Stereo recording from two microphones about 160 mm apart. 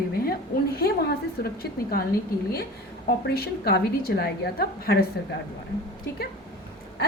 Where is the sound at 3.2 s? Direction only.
80° left.